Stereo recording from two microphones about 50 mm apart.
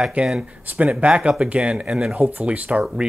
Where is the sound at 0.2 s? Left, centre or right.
Right.